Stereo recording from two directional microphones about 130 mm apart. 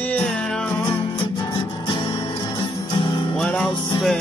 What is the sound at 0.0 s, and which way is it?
Music, 10° left (ahead or behind).